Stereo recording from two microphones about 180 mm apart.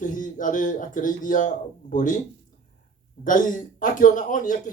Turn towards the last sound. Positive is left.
turn(degrees=45)  # may be behind; listen again after turning